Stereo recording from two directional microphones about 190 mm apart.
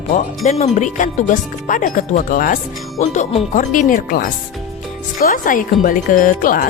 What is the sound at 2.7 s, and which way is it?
Speech, centre (ahead or behind).